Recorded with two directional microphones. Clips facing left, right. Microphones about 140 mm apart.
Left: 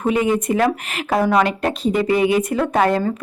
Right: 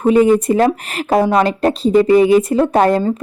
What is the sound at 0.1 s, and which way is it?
Speech, 35° right (ahead or behind).